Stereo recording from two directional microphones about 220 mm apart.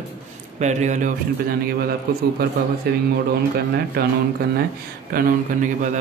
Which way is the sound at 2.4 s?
45° right (ahead or behind).